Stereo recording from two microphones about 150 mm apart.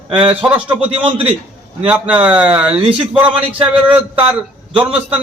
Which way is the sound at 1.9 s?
10° right (ahead or behind).